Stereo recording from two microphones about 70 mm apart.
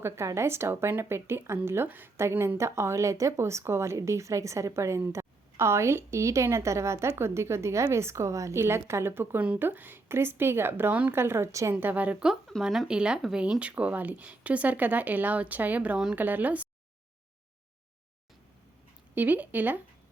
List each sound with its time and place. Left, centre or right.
0.3 s a woman's voice: right
2.6 s a woman's voice: right
11.7 s speech: right
12.9 s speech: centre
19.1 s speech: right